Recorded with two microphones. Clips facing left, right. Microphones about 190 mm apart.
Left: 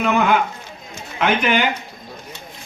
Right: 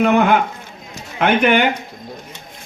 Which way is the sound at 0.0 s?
55° right (ahead or behind).